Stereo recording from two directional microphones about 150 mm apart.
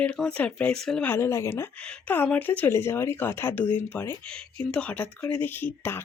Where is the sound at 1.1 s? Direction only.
15° left (ahead or behind).